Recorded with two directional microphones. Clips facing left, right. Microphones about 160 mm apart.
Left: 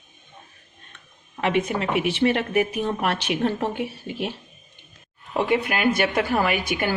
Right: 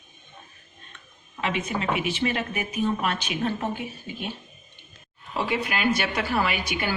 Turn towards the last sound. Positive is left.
turn(degrees=50)  # may be behind; listen again after turning